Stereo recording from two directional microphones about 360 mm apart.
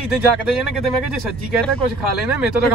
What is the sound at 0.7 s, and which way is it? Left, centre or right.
Speech, centre.